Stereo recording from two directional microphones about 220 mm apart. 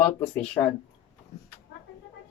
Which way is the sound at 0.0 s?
10° left (ahead or behind).